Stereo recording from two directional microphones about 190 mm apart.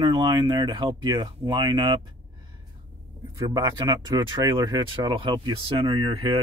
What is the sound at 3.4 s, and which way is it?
Speech, 20° right (ahead or behind).